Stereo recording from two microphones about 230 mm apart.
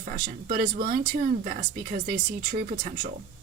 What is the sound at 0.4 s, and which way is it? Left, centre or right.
Speech, right.